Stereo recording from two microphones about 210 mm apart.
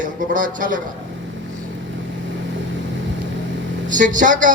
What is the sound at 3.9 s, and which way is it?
Speech, 40° right (ahead or behind).